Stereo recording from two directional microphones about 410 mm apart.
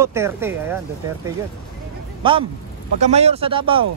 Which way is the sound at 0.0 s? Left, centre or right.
Centre.